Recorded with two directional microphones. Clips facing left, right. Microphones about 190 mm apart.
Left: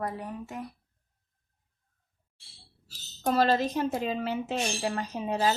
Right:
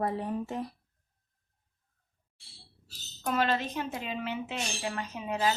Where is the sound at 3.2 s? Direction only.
35° left (ahead or behind).